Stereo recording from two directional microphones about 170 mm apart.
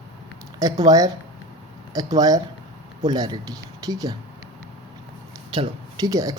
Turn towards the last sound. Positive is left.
turn(degrees=-20)  # may be behind; listen again after turning